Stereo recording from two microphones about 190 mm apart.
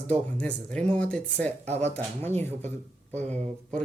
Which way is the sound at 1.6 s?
35° right (ahead or behind).